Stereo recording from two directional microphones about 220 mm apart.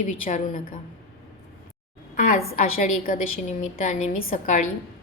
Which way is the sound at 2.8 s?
40° left (ahead or behind).